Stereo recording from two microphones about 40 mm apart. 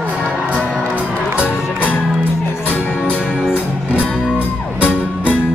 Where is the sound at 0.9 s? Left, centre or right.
Right.